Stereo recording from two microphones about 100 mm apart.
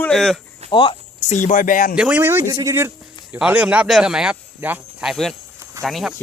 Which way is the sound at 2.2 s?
25° right (ahead or behind).